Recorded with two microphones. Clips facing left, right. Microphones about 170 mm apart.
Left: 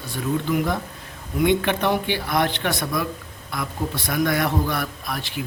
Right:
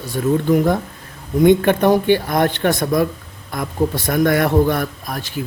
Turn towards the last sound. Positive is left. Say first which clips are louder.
# right 3 dB
turn(degrees=-40)  # may be behind; listen again after turning